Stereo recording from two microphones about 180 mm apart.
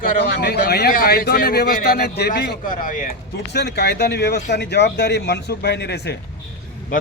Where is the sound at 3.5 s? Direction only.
65° left (ahead or behind).